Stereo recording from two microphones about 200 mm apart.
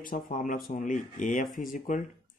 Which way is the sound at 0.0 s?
40° left (ahead or behind).